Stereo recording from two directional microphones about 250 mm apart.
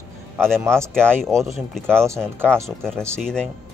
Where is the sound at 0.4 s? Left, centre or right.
Centre.